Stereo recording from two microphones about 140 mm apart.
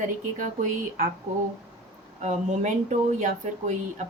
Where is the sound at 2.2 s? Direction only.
60° right (ahead or behind).